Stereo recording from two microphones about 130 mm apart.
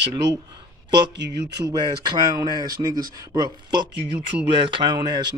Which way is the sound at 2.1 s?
30° right (ahead or behind).